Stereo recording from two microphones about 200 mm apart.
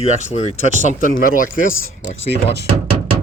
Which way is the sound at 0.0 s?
35° left (ahead or behind).